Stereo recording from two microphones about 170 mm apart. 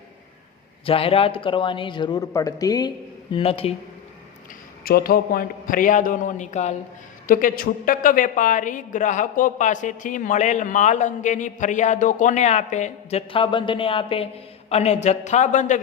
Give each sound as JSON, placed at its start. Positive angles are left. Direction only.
{"t": 0.9, "sound": "a man's voice", "side_deg": 35}
{"t": 3.3, "sound": "speech", "side_deg": 35}
{"t": 4.8, "sound": "a woman's voice", "side_deg": 60}
{"t": 7.3, "sound": "a woman's voice", "side_deg": 55}